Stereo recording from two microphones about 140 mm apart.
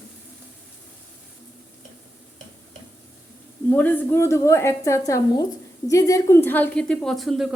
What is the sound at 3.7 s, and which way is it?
A woman's voice, 10° left (ahead or behind).